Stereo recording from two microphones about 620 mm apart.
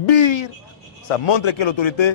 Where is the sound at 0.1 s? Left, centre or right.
Left.